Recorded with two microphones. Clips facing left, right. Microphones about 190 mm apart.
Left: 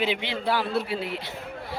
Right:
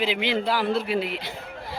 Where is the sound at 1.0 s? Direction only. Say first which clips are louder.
Right 3 dB; 90° right.